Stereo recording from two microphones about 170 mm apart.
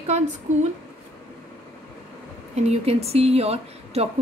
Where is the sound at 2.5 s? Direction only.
40° right (ahead or behind).